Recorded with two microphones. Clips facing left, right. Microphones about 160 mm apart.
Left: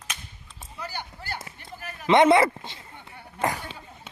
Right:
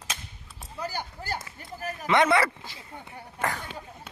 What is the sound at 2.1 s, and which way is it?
Speech, 20° left (ahead or behind).